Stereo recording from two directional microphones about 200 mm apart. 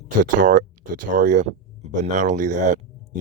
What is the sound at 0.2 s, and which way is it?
Speech, 40° right (ahead or behind).